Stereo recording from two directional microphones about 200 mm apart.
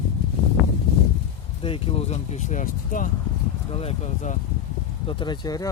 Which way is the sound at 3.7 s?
30° left (ahead or behind).